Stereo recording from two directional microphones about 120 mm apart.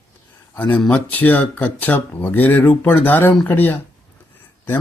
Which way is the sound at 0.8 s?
15° left (ahead or behind).